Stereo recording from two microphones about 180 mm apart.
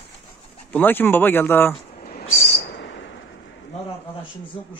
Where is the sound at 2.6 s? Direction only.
75° left (ahead or behind).